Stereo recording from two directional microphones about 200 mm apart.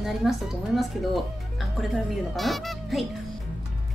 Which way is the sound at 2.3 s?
Centre (ahead or behind).